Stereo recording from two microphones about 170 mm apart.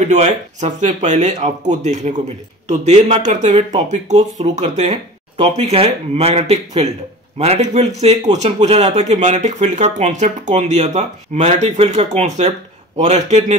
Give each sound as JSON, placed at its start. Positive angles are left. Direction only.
{"t": 0.0, "sound": "speech", "side_deg": -40}